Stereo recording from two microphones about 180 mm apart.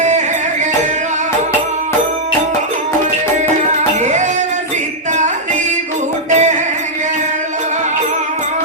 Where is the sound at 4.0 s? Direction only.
40° right (ahead or behind).